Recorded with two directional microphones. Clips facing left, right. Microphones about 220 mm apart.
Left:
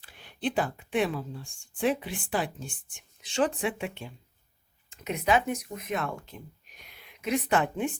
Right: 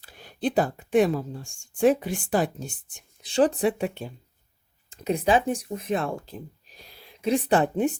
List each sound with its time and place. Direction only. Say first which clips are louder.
0.0 s speech: right 4 dB; 40° right (ahead or behind)